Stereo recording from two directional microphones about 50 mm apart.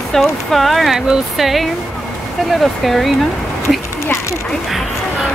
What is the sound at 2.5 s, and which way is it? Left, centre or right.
Speech, centre.